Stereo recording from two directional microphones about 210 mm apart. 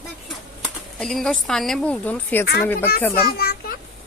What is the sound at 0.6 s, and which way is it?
Speech, centre (ahead or behind).